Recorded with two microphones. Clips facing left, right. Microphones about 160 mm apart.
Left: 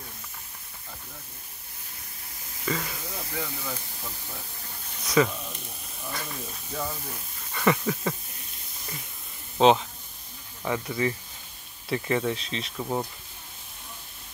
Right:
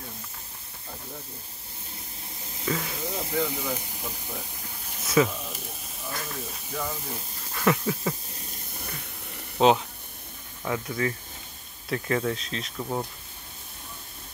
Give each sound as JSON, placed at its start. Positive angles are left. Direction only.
{"t": 2.6, "sound": "speech", "side_deg": -5}
{"t": 3.1, "sound": "speech", "side_deg": -20}
{"t": 5.0, "sound": "speech", "side_deg": 0}
{"t": 6.0, "sound": "hiss", "side_deg": 0}
{"t": 7.5, "sound": "speech", "side_deg": 0}
{"t": 9.6, "sound": "speech", "side_deg": -5}